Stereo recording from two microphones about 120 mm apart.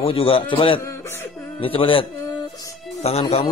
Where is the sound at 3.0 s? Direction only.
60° left (ahead or behind).